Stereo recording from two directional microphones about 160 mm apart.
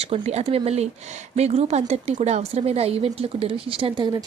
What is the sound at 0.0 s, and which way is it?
A woman's voice, 40° right (ahead or behind).